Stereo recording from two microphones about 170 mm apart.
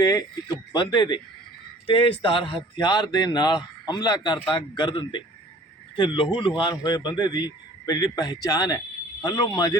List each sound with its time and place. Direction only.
0.0 s speech: 25° left (ahead or behind)